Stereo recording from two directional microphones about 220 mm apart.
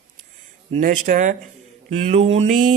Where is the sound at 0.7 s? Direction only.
35° right (ahead or behind).